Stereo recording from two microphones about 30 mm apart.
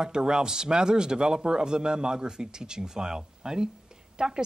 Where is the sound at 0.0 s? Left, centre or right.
Right.